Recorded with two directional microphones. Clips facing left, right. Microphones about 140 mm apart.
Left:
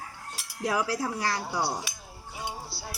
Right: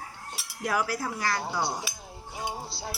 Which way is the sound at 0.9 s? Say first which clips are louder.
Left 1 dB; 35° left (ahead or behind).